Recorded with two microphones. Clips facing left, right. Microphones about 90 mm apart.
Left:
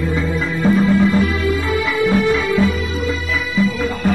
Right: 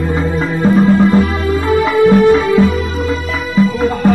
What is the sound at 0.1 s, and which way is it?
Music, 45° right (ahead or behind).